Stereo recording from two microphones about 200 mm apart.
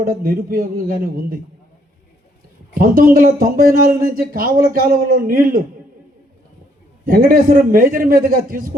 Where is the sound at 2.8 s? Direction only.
45° right (ahead or behind).